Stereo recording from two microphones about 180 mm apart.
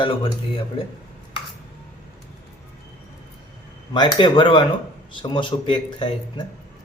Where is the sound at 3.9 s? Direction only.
25° left (ahead or behind).